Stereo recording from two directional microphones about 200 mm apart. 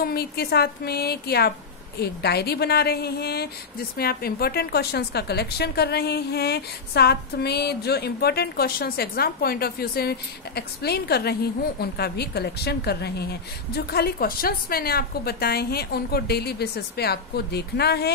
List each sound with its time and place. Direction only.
0.0 s a woman's voice: 50° left (ahead or behind)